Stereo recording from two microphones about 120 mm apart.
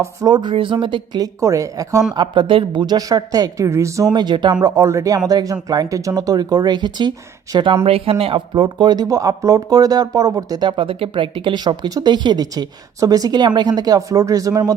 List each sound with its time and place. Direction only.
0.0 s speech: 30° right (ahead or behind)
1.4 s speech: 25° right (ahead or behind)
2.1 s speech: 40° right (ahead or behind); by 4.1 s 25° right (ahead or behind)
4.1 s speech: 40° right (ahead or behind)
4.6 s speech: 25° right (ahead or behind)